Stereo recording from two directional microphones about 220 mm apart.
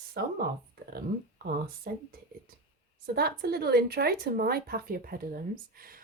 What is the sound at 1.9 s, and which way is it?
Speech, 45° right (ahead or behind).